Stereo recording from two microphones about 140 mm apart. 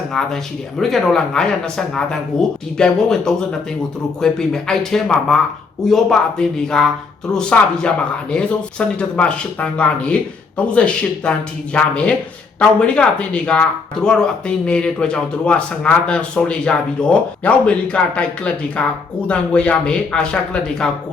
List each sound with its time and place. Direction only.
0.1 s speech: 5° left (ahead or behind)